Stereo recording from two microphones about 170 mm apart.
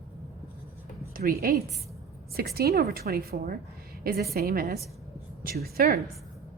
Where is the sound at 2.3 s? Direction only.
65° right (ahead or behind).